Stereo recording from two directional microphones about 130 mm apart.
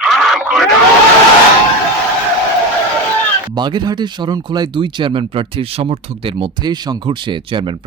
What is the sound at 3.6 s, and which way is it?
Speech, 35° right (ahead or behind).